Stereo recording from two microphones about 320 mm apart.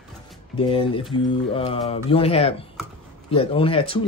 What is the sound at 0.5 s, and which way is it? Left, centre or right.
Speech, centre.